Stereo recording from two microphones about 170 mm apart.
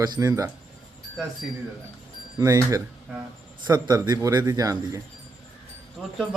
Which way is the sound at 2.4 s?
20° right (ahead or behind).